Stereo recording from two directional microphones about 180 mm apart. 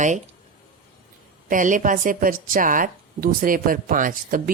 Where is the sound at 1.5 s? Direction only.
45° right (ahead or behind).